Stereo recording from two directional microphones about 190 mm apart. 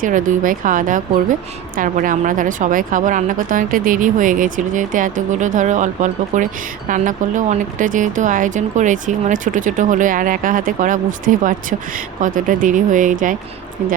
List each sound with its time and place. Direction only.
0.0 s a woman's voice: 45° right (ahead or behind)